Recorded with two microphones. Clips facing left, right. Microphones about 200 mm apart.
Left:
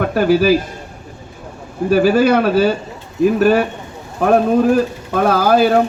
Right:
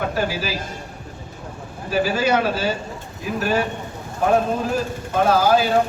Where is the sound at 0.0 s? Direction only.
60° left (ahead or behind).